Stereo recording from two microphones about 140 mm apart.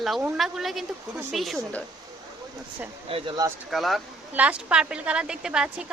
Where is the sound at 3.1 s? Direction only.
40° right (ahead or behind).